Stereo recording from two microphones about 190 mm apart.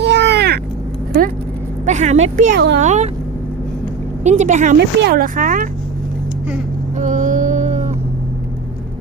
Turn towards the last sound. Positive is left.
turn(degrees=-40)  # may be behind; listen again after turning